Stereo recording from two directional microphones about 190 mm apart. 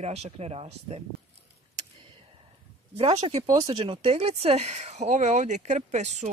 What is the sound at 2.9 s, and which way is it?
Speech, 35° right (ahead or behind).